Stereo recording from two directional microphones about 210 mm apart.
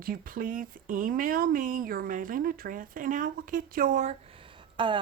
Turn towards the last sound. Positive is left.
turn(degrees=-25)  # may be behind; listen again after turning